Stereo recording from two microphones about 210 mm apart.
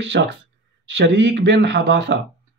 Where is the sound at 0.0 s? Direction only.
55° right (ahead or behind).